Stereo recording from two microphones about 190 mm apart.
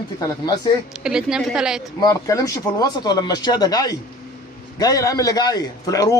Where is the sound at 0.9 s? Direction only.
5° right (ahead or behind).